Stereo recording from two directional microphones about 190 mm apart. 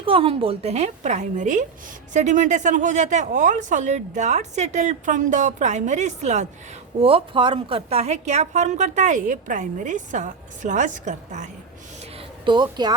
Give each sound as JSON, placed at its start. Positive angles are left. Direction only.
{"t": 0.0, "sound": "a woman's voice", "side_deg": -30}
{"t": 7.0, "sound": "a woman's voice", "side_deg": -25}
{"t": 12.1, "sound": "a sound", "side_deg": -25}